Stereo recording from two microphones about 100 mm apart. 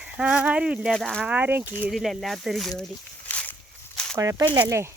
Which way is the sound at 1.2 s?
15° right (ahead or behind).